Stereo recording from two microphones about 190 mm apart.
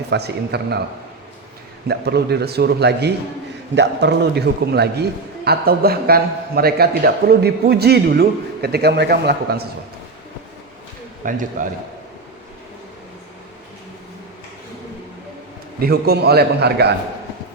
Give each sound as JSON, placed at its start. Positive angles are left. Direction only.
{"t": 0.1, "sound": "a man's voice", "side_deg": -60}
{"t": 1.9, "sound": "a man's voice", "side_deg": -60}
{"t": 11.3, "sound": "a man's voice", "side_deg": -45}
{"t": 15.8, "sound": "a man's voice", "side_deg": -55}